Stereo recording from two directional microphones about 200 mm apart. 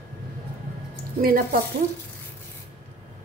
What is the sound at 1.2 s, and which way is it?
Speech, 45° right (ahead or behind).